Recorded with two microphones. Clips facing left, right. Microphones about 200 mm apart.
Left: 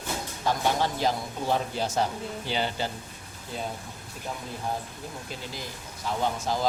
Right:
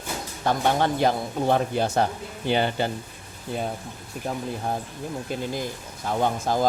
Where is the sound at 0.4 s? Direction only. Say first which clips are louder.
Right 4 dB; 60° right (ahead or behind).